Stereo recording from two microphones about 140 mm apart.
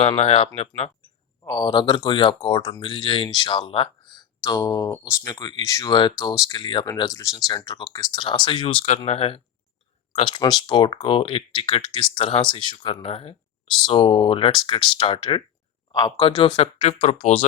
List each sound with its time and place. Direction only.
0.2 s speech: 45° left (ahead or behind)
1.5 s speech: 30° left (ahead or behind)
10.2 s speech: 35° left (ahead or behind); by 17.4 s 55° left (ahead or behind)